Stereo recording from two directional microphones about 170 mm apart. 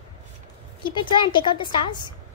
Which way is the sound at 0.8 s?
30° left (ahead or behind).